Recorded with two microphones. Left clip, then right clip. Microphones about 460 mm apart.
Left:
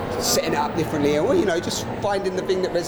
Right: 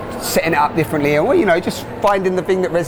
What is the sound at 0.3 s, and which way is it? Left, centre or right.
Speech, right.